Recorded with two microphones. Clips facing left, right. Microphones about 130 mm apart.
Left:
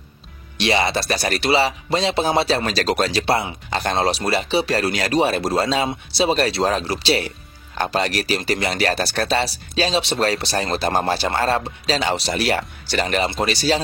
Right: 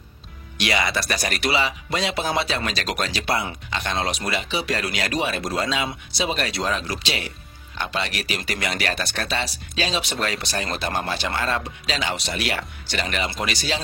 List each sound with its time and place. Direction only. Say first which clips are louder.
0.6 s speech: left 4 dB; 30° left (ahead or behind)